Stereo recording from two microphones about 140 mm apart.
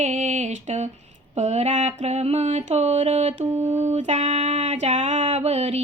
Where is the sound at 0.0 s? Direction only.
55° right (ahead or behind).